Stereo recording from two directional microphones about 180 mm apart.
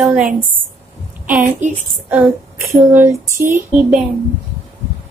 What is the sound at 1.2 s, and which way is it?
Speech, 50° right (ahead or behind).